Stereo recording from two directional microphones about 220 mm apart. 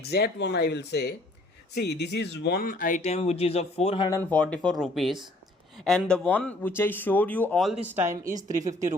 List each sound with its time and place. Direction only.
0.1 s speech: 50° left (ahead or behind); by 4.2 s 25° left (ahead or behind)
4.3 s speech: 5° left (ahead or behind); by 8.3 s 10° right (ahead or behind)
8.3 s a woman's voice: 35° right (ahead or behind)